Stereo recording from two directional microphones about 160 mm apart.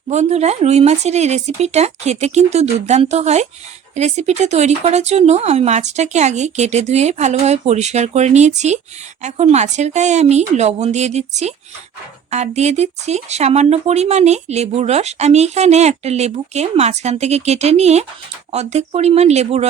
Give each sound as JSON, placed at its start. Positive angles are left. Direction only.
{"t": 0.1, "sound": "speech", "side_deg": -45}